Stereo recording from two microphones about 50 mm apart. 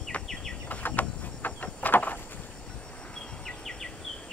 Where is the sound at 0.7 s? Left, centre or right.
Left.